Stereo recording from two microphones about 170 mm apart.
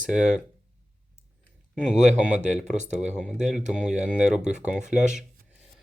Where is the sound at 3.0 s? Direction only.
5° right (ahead or behind).